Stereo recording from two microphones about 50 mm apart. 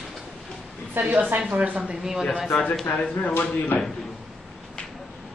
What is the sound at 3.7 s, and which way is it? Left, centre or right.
Speech, left.